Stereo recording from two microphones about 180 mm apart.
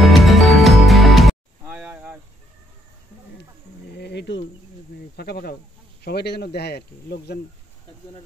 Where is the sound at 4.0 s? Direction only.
70° left (ahead or behind).